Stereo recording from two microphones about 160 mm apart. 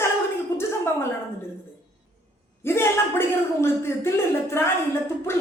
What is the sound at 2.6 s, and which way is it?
Speech, 15° left (ahead or behind).